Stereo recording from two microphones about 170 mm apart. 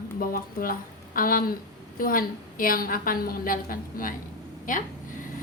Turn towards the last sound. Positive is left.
turn(degrees=50)  # may be behind; listen again after turning